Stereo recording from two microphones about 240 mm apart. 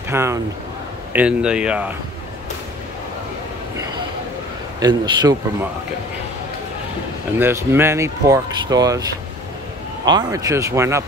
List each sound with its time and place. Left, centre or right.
0.1 s a man's voice: centre
4.7 s speech: centre
7.3 s speech: centre
10.0 s speech: centre